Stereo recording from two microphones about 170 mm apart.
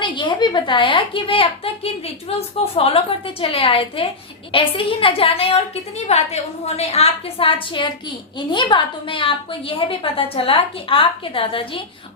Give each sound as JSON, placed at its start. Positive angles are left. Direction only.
{"t": 0.0, "sound": "a woman's voice", "side_deg": 30}